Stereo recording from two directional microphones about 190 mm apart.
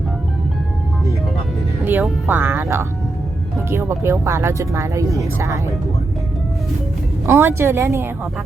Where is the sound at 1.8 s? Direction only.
10° right (ahead or behind).